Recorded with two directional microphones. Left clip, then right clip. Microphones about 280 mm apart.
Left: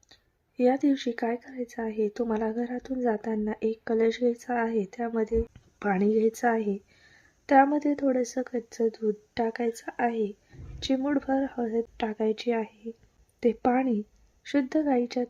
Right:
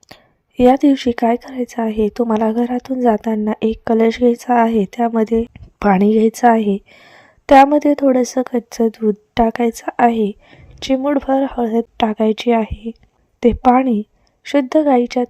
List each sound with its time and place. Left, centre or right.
0.1 s a woman's voice: right